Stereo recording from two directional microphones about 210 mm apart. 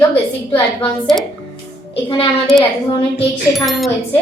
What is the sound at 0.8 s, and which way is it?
Speech, centre (ahead or behind).